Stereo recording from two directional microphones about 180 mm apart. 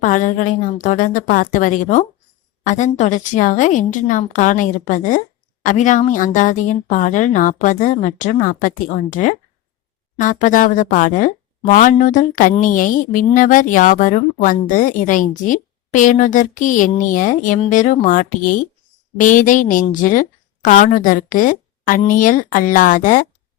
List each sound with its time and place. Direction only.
0.0 s a woman's voice: 45° left (ahead or behind)